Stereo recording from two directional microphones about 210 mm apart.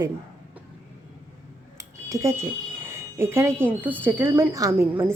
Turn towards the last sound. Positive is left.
turn(degrees=-15)  # may be behind; listen again after turning